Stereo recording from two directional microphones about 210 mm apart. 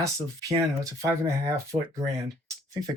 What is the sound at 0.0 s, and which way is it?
Speech, 15° right (ahead or behind).